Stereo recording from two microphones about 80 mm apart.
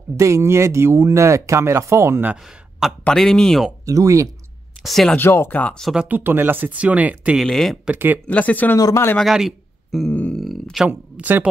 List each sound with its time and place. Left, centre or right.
0.2 s speech: right
3.1 s speech: centre
3.8 s speech: right
4.8 s speech: centre
5.1 s speech: left
5.9 s speech: right
7.4 s speech: centre
7.9 s speech: right
8.3 s speech: centre
8.7 s speech: left
9.2 s speech: centre
10.3 s a sound: centre
10.9 s speech: right